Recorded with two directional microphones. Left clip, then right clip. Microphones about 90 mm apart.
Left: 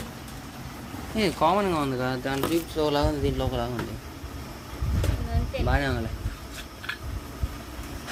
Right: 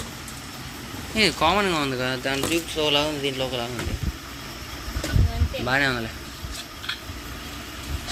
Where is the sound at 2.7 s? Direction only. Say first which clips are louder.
Right 4 dB; 80° left.